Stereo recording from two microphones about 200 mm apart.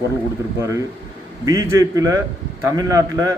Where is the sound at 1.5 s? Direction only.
15° right (ahead or behind).